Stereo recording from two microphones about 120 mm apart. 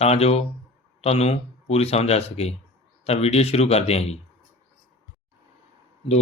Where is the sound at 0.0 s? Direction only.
60° left (ahead or behind).